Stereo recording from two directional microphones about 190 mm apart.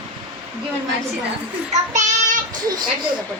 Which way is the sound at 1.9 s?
40° right (ahead or behind).